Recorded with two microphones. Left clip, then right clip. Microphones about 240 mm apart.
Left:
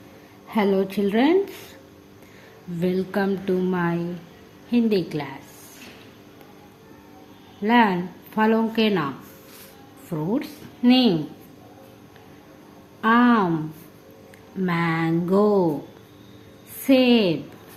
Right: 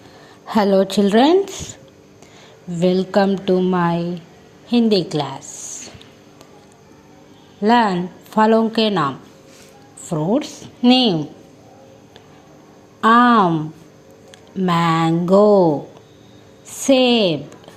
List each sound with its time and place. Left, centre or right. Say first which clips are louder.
0.4 s a woman's voice: right 7 dB; right
2.8 s a woman's voice: right 8 dB; right
7.6 s a woman's voice: right 4 dB; right
13.0 s a sound: right 7 dB; right
14.6 s a woman's voice: right 7 dB; right
16.8 s a woman's voice: right 4 dB; right